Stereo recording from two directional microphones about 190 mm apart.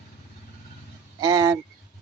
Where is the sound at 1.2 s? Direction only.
20° right (ahead or behind).